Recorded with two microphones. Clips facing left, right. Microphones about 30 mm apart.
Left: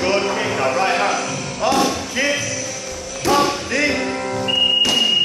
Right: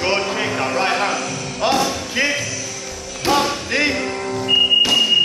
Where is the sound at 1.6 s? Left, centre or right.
Right.